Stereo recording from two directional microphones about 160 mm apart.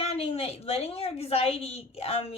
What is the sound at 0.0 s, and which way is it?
A woman's voice, 40° left (ahead or behind).